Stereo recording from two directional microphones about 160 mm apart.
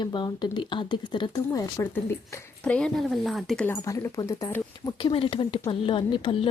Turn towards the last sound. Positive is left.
turn(degrees=30)  # may be behind; listen again after turning